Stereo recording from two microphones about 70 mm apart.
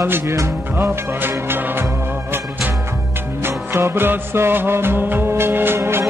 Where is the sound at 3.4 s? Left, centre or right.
Right.